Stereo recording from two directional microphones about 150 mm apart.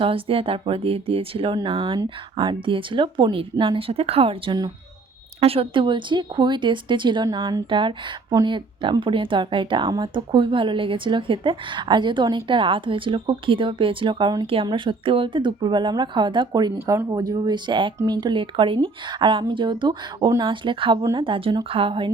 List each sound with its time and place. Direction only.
0.0 s speech: 40° right (ahead or behind)